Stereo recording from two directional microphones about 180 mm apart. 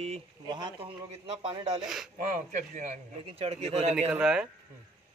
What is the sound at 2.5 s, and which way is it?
A man's voice, 40° right (ahead or behind).